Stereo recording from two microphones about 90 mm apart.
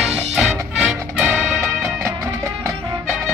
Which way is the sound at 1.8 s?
35° right (ahead or behind).